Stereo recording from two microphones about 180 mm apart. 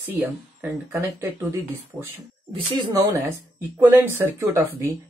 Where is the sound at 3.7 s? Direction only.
15° right (ahead or behind).